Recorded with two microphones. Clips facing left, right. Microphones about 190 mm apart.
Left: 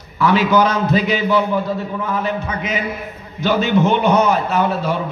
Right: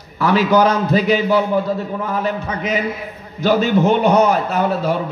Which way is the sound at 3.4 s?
40° right (ahead or behind).